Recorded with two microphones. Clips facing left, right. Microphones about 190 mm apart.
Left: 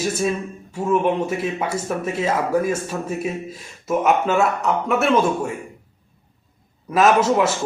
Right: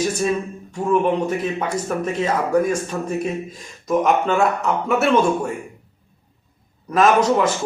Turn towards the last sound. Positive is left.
turn(degrees=5)  # may be behind; listen again after turning